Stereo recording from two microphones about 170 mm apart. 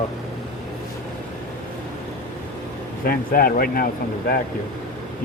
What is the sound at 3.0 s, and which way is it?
Speech, 60° left (ahead or behind).